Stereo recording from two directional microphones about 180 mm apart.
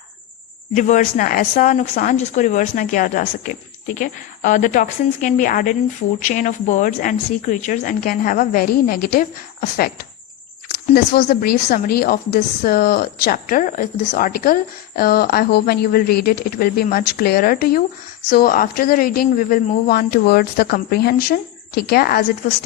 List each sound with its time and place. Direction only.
0.7 s a woman's voice: 45° left (ahead or behind)